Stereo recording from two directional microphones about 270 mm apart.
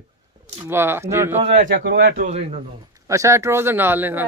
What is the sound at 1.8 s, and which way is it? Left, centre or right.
Speech, right.